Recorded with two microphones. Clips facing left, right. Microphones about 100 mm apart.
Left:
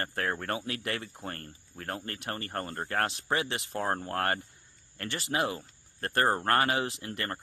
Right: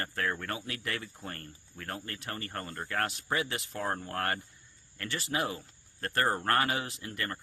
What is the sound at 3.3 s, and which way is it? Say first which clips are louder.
Speech: left 1 dB; 25° left (ahead or behind).